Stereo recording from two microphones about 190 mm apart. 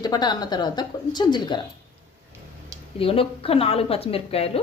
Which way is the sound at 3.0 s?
30° left (ahead or behind).